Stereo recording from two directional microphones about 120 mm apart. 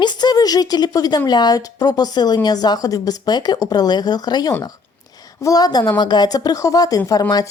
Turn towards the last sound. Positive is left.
turn(degrees=30)  # may be behind; listen again after turning